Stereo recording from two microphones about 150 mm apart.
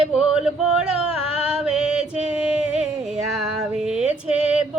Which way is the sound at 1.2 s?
40° left (ahead or behind).